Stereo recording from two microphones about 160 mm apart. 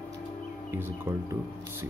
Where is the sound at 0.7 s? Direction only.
15° right (ahead or behind).